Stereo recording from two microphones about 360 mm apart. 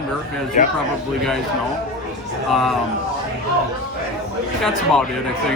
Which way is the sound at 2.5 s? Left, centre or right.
Centre.